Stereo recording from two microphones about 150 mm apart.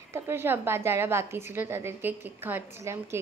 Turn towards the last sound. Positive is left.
turn(degrees=-20)  # may be behind; listen again after turning